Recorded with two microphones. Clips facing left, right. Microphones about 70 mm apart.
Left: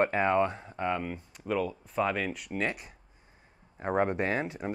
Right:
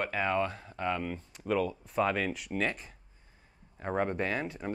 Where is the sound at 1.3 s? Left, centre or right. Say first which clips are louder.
Right 1 dB; centre.